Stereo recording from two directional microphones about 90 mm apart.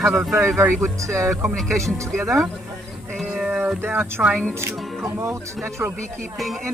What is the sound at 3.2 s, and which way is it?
Music, 5° right (ahead or behind).